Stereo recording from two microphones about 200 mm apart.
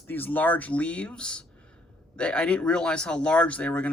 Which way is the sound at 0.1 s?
10° left (ahead or behind).